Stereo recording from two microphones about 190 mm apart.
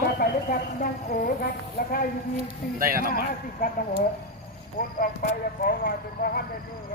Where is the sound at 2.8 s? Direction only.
50° right (ahead or behind).